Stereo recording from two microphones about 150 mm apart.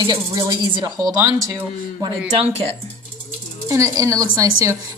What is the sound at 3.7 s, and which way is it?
Speech, 20° right (ahead or behind).